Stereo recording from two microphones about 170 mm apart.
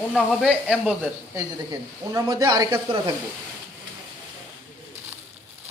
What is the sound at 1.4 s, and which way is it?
Speech, 20° right (ahead or behind).